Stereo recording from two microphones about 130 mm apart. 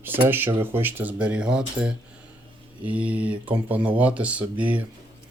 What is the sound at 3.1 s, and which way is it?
Speech, 10° right (ahead or behind).